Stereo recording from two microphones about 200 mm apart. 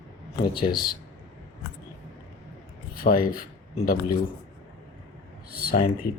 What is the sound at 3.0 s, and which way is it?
Speech, 45° left (ahead or behind).